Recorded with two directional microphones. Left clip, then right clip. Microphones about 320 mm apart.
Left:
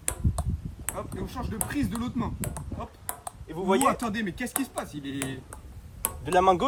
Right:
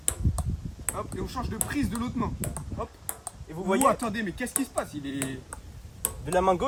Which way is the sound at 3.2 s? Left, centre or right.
Left.